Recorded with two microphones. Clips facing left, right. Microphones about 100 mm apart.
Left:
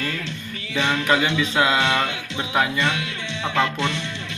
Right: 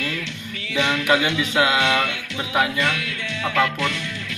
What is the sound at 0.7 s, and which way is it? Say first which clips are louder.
Speech: right 1 dB; 30° left (ahead or behind).